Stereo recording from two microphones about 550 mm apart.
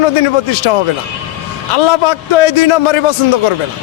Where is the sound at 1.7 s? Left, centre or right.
Left.